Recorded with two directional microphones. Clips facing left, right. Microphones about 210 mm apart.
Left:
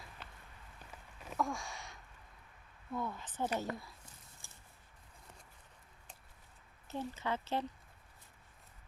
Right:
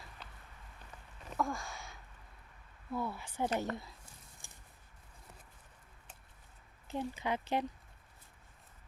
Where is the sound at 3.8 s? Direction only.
15° right (ahead or behind).